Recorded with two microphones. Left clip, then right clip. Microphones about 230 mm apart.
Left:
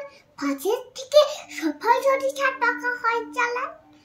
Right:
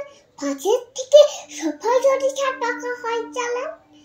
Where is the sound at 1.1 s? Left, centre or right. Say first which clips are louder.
Right 5 dB; left.